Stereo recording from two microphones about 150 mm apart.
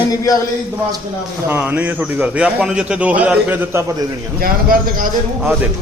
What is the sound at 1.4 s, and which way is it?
A man's voice, 10° right (ahead or behind).